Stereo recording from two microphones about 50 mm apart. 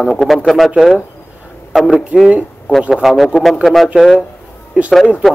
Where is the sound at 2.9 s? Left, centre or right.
Centre.